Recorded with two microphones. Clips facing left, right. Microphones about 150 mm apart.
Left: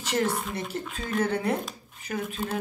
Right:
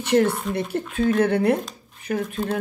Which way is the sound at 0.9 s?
60° right (ahead or behind).